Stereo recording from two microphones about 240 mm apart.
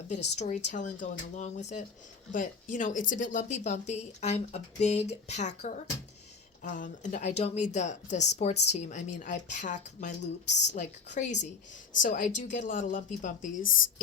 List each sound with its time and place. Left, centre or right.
0.1 s speech: left
13.6 s speech: left